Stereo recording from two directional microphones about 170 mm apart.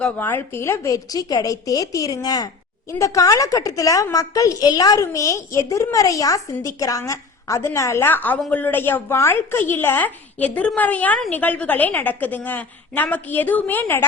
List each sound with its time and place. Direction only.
0.0 s a woman's voice: 10° left (ahead or behind)